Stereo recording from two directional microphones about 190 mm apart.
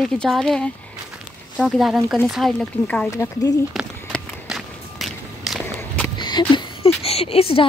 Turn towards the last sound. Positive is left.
turn(degrees=30)  # may be behind; listen again after turning